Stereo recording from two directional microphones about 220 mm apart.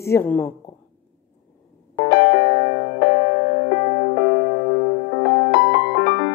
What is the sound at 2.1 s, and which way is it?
Music, 50° left (ahead or behind).